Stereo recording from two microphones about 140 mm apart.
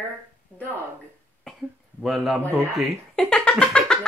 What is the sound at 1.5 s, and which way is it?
Throat clearing, 5° left (ahead or behind).